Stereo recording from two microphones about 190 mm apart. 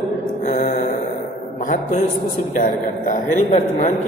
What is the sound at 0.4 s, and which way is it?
Mantra, 40° left (ahead or behind).